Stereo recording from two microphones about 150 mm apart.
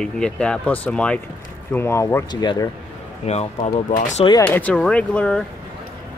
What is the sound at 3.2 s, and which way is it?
Speech, 45° left (ahead or behind).